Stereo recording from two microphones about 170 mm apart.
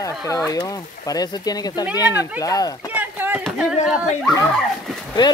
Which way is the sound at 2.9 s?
10° right (ahead or behind).